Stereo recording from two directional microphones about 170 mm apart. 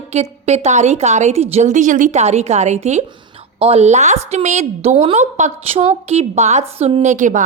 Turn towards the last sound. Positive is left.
turn(degrees=-45)  # may be behind; listen again after turning